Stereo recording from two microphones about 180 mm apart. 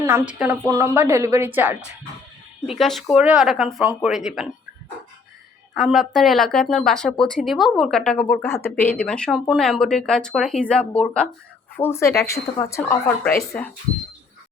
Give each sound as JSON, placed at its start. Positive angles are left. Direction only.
{"t": 0.0, "sound": "a woman's voice", "side_deg": -15}
{"t": 2.6, "sound": "speech", "side_deg": 0}
{"t": 5.9, "sound": "speech", "side_deg": 0}